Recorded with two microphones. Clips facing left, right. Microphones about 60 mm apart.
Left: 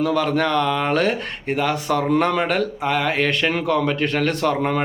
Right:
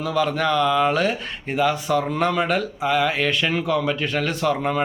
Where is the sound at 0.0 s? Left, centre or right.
Left.